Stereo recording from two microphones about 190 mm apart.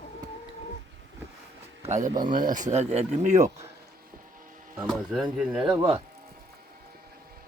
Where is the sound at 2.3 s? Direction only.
45° right (ahead or behind).